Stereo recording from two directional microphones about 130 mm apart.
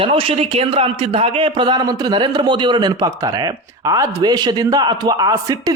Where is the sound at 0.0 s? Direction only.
45° right (ahead or behind).